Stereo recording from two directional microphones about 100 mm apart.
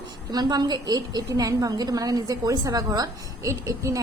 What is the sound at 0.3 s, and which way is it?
A woman's voice, 45° right (ahead or behind).